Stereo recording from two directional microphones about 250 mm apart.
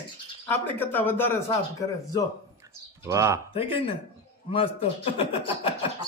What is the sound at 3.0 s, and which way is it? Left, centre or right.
Speech, centre.